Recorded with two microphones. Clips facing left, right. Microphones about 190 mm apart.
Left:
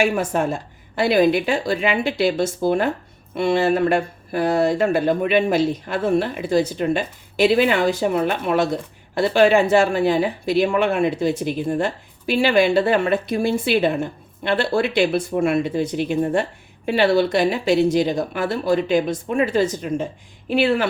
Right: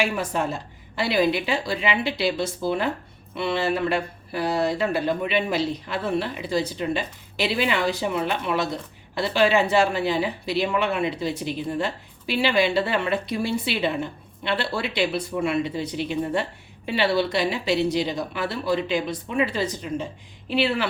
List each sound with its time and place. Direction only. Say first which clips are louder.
0.0 s speech: left 5 dB; 50° left (ahead or behind)